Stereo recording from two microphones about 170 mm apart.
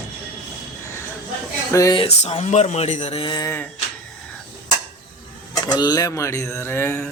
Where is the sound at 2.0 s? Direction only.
35° left (ahead or behind).